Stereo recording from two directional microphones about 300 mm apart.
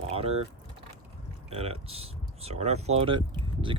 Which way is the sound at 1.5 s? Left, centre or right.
Centre.